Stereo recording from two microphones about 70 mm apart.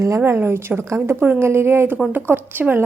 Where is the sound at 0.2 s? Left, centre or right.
Right.